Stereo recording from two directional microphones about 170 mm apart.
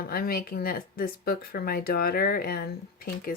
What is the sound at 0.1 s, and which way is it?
Speech, 60° left (ahead or behind).